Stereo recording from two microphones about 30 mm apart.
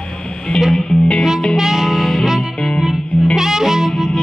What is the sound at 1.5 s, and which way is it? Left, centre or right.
Music, centre.